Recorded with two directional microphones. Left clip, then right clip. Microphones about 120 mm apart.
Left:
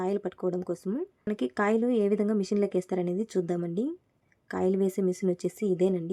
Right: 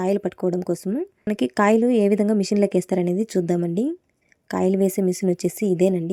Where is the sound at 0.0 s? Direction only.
35° right (ahead or behind).